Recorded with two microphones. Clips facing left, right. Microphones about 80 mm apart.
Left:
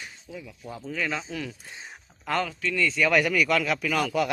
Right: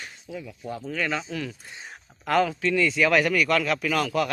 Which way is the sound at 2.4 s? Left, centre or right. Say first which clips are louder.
Right 5 dB; centre.